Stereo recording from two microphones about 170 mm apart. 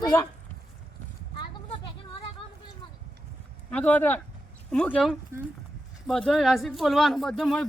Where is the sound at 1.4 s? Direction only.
25° left (ahead or behind).